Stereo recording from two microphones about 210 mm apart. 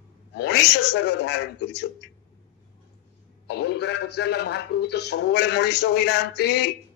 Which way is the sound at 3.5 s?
50° left (ahead or behind).